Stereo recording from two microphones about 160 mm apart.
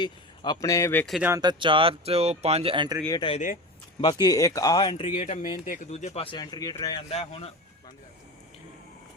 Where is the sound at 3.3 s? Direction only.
50° left (ahead or behind).